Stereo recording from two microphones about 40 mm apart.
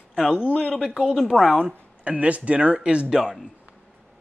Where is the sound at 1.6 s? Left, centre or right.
Right.